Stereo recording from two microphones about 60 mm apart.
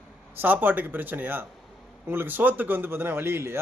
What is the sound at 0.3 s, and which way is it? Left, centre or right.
Speech, right.